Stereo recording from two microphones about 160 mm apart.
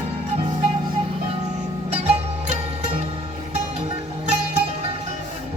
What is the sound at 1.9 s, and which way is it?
Music, 40° right (ahead or behind).